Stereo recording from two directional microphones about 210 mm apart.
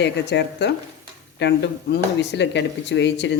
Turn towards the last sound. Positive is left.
turn(degrees=55)  # may be behind; listen again after turning